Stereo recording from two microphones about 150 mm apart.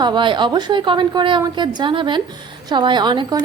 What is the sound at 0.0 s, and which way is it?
A woman's voice, 30° right (ahead or behind).